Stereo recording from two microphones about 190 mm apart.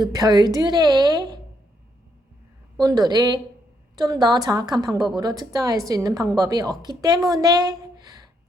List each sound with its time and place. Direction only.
0.1 s a woman's voice: 20° right (ahead or behind)
2.7 s a woman's voice: 20° right (ahead or behind)